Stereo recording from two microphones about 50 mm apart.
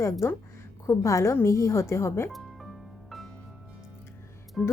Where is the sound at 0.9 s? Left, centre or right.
Left.